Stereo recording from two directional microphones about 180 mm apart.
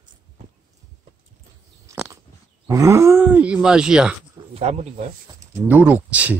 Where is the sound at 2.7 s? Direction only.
15° right (ahead or behind).